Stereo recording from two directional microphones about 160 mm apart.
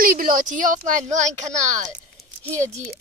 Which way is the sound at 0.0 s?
60° right (ahead or behind).